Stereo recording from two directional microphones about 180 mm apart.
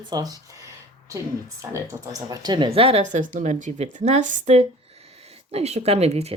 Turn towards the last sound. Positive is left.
turn(degrees=-35)  # may be behind; listen again after turning